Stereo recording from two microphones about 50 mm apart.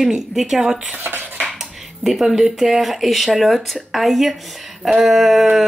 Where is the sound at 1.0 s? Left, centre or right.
Right.